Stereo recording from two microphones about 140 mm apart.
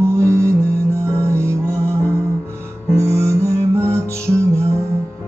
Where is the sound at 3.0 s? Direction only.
20° right (ahead or behind).